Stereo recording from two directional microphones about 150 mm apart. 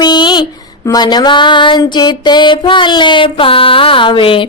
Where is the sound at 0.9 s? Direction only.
30° left (ahead or behind).